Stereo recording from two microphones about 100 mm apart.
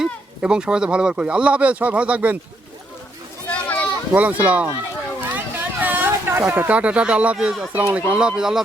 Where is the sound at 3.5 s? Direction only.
15° left (ahead or behind).